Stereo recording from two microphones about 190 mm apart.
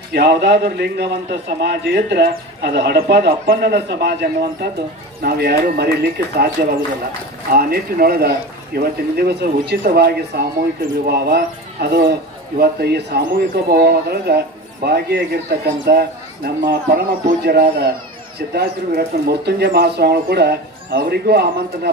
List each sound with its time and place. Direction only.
0.1 s speech: 60° right (ahead or behind)
7.5 s speech: 50° right (ahead or behind)